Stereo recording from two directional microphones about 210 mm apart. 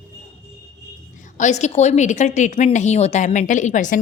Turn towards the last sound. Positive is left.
turn(degrees=35)  # may be behind; listen again after turning